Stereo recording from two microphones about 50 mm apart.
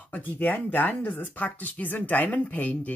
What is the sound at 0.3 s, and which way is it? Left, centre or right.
Speech, left.